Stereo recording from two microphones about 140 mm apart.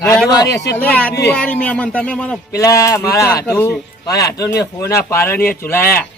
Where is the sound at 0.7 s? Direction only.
10° left (ahead or behind).